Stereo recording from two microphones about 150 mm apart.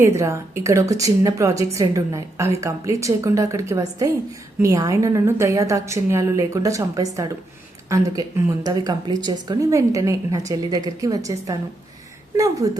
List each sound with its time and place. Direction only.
0.0 s speech: 20° right (ahead or behind)